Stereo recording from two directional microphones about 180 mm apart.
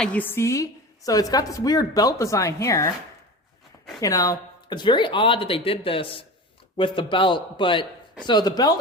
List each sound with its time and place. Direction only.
0.0 s a woman's voice: 10° left (ahead or behind)
4.0 s speech: 20° left (ahead or behind)